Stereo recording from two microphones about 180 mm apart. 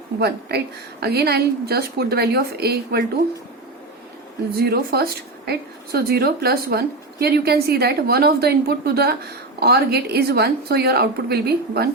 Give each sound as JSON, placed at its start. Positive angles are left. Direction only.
{"t": 0.2, "sound": "a woman's voice", "side_deg": -65}
{"t": 4.5, "sound": "a woman's voice", "side_deg": -60}